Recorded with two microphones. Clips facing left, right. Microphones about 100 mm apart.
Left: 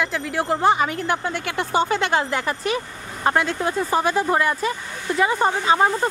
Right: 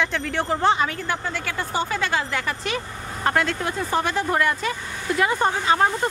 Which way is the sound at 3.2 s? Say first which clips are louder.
Left 2 dB; 15° left (ahead or behind).